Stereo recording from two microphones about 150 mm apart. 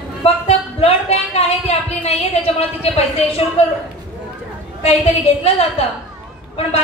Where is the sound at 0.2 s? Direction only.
40° left (ahead or behind).